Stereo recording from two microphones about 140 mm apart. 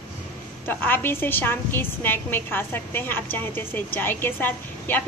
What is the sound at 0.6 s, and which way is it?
A woman's voice, 15° left (ahead or behind).